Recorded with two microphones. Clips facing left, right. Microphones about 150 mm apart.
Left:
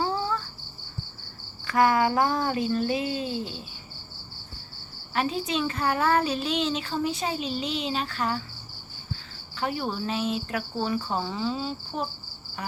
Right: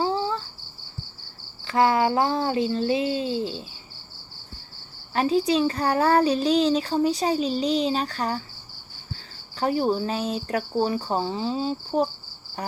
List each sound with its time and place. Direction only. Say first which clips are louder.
0.0 s cricket: right 3 dB; 30° right (ahead or behind)
1.6 s a sound: right 1 dB; 25° right (ahead or behind)
5.1 s a child's voice: right 6 dB; 35° right (ahead or behind)